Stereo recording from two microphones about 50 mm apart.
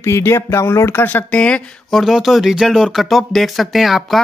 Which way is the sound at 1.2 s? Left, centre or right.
Left.